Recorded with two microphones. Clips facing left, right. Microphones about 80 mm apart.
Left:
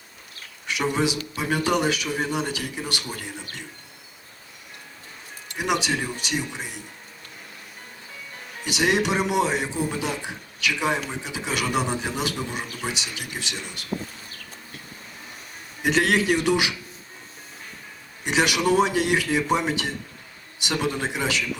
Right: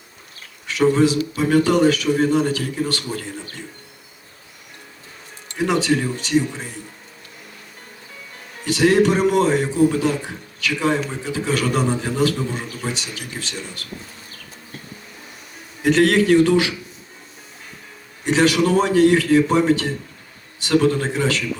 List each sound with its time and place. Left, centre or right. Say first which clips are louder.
0.7 s a man's voice: right 8 dB; centre
5.5 s a man's voice: right 6 dB; centre
8.6 s a man's voice: right 7 dB; centre
15.8 s a man's voice: right 6 dB; centre
18.3 s a man's voice: right 5 dB; centre